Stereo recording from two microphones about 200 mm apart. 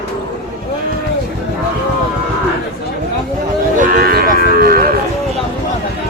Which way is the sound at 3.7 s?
45° right (ahead or behind).